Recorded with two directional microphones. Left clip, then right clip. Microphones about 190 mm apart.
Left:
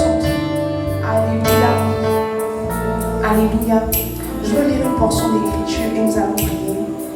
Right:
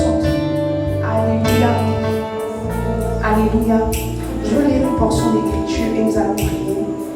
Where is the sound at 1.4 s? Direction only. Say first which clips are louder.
Left 5 dB; 30° left (ahead or behind).